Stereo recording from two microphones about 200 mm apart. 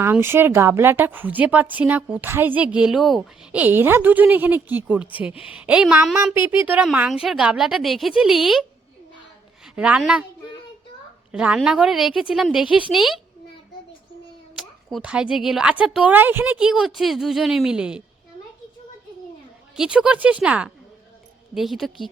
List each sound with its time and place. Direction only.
0.0 s a woman's voice: 10° right (ahead or behind)
9.7 s a woman's voice: 5° right (ahead or behind)
11.3 s a woman's voice: 5° right (ahead or behind)
14.5 s a woman's voice: centre (ahead or behind)
19.7 s a woman's voice: 5° right (ahead or behind)